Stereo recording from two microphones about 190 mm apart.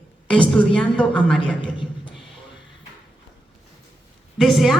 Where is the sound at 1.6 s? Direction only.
25° left (ahead or behind).